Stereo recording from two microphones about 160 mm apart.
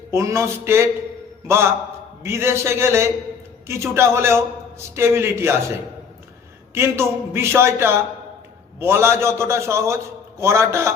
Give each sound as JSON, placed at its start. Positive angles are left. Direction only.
{"t": 0.1, "sound": "a man's voice", "side_deg": -20}
{"t": 6.7, "sound": "a man's voice", "side_deg": -15}